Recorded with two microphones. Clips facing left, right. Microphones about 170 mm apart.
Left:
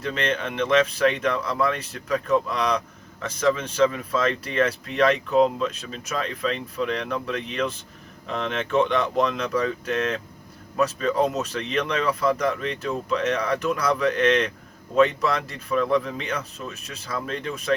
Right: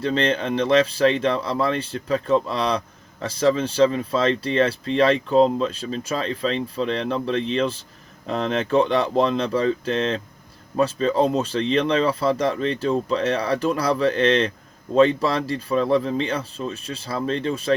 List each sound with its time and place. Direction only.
0.0 s speech: 30° right (ahead or behind)